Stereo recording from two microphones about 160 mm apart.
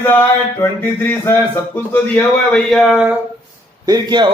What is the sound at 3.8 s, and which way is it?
Speech, 25° right (ahead or behind).